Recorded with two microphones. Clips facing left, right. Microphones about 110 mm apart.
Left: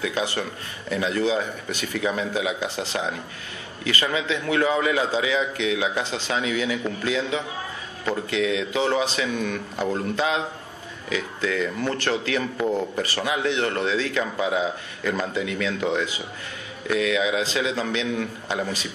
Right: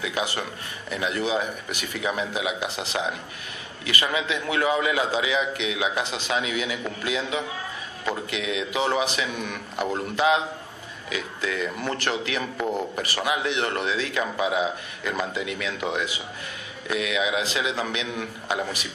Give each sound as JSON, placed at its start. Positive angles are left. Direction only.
{"t": 0.0, "sound": "a man's voice", "side_deg": -15}